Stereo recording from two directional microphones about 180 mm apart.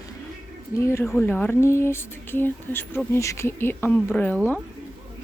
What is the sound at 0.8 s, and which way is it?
Speech, 10° left (ahead or behind).